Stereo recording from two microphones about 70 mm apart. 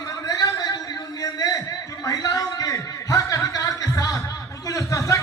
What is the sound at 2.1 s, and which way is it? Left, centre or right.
Chuckle, left.